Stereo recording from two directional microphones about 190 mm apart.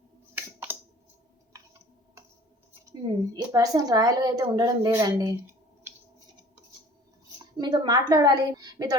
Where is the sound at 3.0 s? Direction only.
20° right (ahead or behind).